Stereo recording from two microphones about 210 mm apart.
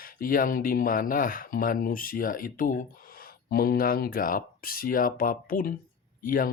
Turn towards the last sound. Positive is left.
turn(degrees=40)  # may be behind; listen again after turning